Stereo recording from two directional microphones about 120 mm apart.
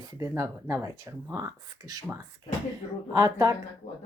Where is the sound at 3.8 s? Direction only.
70° left (ahead or behind).